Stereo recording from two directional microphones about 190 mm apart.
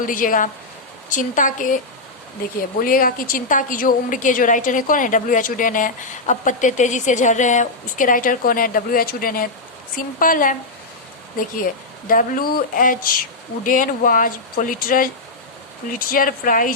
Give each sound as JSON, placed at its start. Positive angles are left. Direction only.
{"t": 0.0, "sound": "a woman's voice", "side_deg": 45}
{"t": 2.8, "sound": "a woman's voice", "side_deg": 50}
{"t": 12.0, "sound": "a woman's voice", "side_deg": 45}